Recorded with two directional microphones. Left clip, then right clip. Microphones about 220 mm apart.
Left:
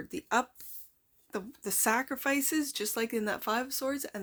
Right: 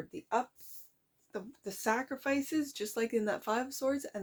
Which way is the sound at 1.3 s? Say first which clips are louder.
Left 5 dB; 30° left (ahead or behind).